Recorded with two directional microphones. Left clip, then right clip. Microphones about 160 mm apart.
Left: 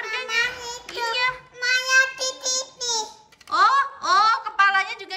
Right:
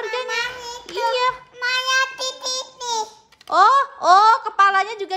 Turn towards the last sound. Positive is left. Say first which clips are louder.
# right 3 dB
turn(degrees=-45)  # may be behind; listen again after turning